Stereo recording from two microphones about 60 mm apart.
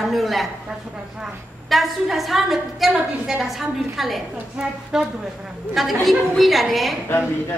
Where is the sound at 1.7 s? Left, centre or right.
Centre.